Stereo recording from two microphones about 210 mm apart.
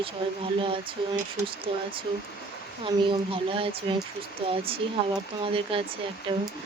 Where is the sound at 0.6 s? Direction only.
25° right (ahead or behind).